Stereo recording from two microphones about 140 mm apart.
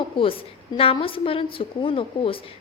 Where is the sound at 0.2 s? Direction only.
40° left (ahead or behind).